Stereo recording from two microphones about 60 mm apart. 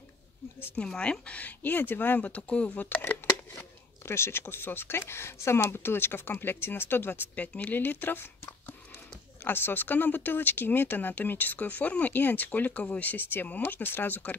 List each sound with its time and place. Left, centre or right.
0.8 s speech: centre; by 3.0 s left
3.5 s speech: left
9.4 s speech: left